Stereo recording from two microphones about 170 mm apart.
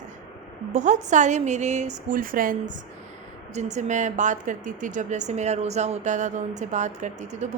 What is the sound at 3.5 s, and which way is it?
A woman's voice, 40° right (ahead or behind).